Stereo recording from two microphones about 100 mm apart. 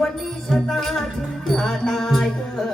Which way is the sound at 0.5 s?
5° left (ahead or behind).